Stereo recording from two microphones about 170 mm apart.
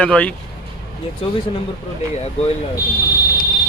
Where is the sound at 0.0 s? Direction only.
5° left (ahead or behind).